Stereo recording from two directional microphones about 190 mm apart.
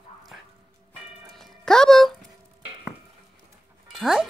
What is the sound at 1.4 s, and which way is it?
Music, centre (ahead or behind).